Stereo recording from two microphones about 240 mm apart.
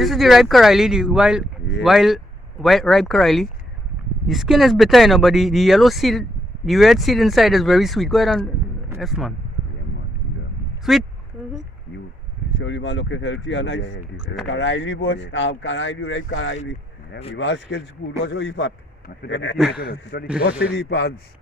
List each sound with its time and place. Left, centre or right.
0.0 s speech: centre
10.8 s speech: centre
12.5 s speech: left